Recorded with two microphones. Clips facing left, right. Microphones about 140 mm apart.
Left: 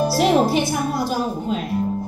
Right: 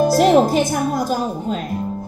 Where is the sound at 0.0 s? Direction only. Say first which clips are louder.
Right 4 dB; 45° right (ahead or behind).